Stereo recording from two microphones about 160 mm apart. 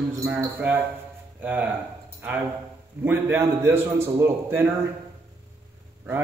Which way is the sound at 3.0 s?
15° right (ahead or behind).